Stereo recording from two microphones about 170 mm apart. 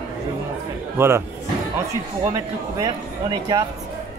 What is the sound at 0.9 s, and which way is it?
Speech, 15° right (ahead or behind).